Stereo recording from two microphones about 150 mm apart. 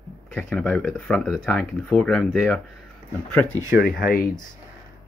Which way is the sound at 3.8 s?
80° left.